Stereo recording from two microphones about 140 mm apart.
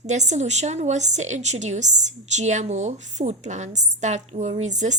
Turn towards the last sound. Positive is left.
turn(degrees=-55)  # may be behind; listen again after turning